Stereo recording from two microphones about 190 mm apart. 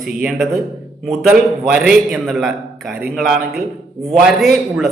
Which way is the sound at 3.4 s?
50° right (ahead or behind).